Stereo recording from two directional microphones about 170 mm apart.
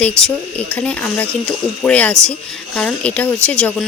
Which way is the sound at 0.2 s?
5° left (ahead or behind).